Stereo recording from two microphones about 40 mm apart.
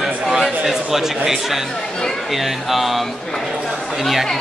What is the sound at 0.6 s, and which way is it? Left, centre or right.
Speech, centre.